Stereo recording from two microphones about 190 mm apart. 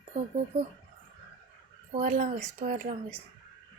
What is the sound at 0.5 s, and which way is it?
Speech, 40° right (ahead or behind).